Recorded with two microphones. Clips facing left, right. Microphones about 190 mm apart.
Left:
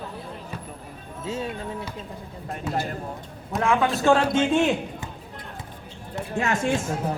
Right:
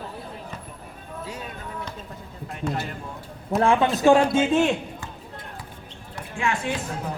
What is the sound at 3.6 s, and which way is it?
Speech, 25° right (ahead or behind).